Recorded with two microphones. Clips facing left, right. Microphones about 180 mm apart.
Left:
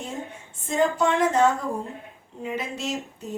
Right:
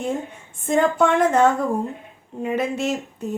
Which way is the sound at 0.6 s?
55° right (ahead or behind).